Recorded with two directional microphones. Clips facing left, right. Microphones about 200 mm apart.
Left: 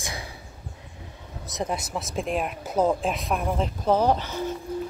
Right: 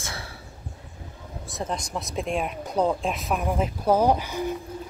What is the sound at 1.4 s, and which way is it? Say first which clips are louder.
Speech: left 2 dB; 20° left (ahead or behind).